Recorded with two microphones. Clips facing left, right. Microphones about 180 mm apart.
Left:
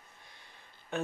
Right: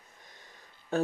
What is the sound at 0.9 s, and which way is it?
Speech, 35° right (ahead or behind).